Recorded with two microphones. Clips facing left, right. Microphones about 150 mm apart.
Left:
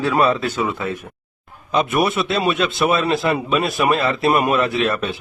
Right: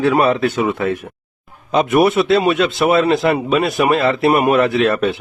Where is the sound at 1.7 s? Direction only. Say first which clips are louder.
Right 5 dB; 25° right (ahead or behind).